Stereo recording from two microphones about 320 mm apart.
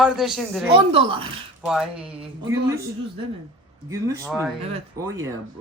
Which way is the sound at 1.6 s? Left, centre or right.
Centre.